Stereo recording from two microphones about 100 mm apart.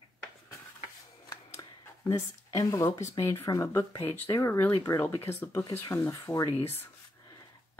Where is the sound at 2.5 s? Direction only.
30° left (ahead or behind).